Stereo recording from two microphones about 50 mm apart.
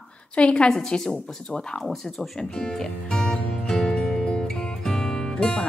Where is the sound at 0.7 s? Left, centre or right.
Centre.